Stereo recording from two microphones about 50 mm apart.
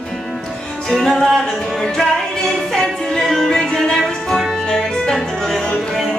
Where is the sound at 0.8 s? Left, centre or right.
Centre.